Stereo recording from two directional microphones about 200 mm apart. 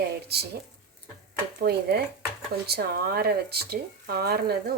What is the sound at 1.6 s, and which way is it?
Speech, 55° right (ahead or behind).